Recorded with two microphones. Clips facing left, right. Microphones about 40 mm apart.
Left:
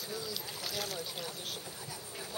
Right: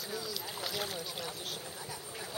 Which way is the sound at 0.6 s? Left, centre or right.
Right.